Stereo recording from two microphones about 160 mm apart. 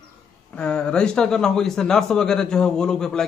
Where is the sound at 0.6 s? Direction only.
5° left (ahead or behind).